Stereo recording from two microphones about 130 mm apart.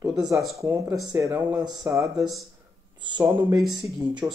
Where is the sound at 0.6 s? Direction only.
20° right (ahead or behind).